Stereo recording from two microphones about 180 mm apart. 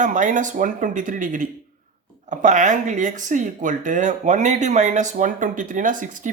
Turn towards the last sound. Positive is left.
turn(degrees=-45)  # may be behind; listen again after turning